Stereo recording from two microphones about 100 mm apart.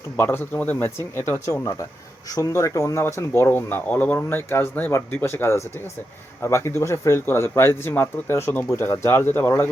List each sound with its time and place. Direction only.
0.2 s speech: 20° left (ahead or behind)